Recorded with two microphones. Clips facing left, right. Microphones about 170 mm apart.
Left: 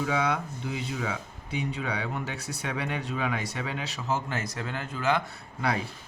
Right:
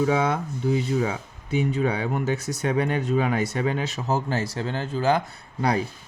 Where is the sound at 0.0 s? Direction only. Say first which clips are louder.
Right 5 dB; 40° right (ahead or behind).